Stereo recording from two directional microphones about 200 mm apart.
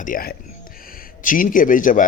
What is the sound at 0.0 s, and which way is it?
A man's voice, 45° left (ahead or behind).